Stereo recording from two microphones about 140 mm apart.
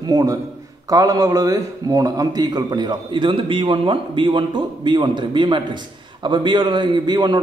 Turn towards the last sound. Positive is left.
turn(degrees=-30)  # may be behind; listen again after turning